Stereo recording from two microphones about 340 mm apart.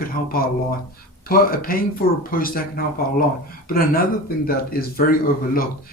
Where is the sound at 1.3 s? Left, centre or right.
Left.